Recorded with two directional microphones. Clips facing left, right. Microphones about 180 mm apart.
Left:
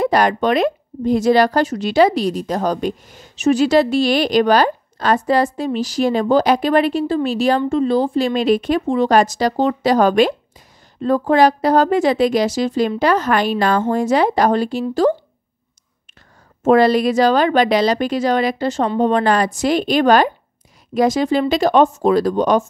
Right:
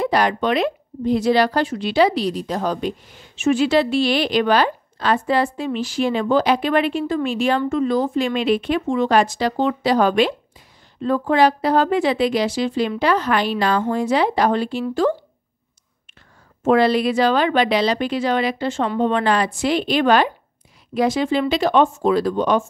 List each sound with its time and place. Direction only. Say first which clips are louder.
0.0 s a woman's voice: left 3 dB; 45° left (ahead or behind)
16.6 s a woman's voice: left 3 dB; 40° left (ahead or behind)